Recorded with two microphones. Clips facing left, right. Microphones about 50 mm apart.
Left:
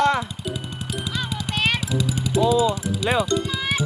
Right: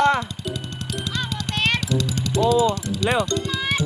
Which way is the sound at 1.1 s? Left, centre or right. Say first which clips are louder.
Even; centre.